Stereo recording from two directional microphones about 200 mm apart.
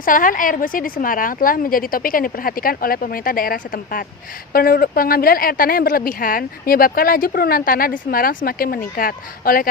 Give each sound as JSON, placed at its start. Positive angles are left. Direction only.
{"t": 0.0, "sound": "speech", "side_deg": 45}